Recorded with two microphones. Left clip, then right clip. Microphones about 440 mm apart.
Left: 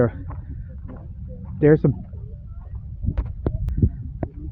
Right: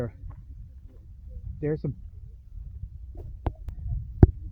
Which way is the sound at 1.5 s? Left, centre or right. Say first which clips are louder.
Left 14 dB; right.